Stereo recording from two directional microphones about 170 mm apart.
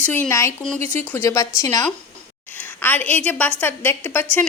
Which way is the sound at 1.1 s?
15° left (ahead or behind).